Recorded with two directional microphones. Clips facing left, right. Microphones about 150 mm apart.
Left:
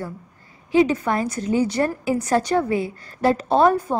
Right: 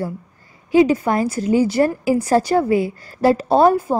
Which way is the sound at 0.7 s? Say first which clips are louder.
Right 4 dB; 40° right (ahead or behind).